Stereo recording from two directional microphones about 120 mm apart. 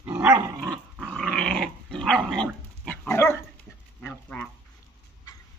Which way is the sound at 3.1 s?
20° left (ahead or behind).